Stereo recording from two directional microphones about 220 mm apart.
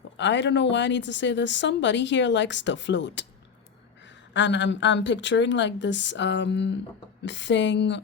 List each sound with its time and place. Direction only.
0.2 s speech: 55° left (ahead or behind)